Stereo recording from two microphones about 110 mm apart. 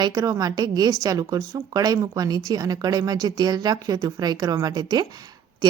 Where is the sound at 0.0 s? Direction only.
35° right (ahead or behind).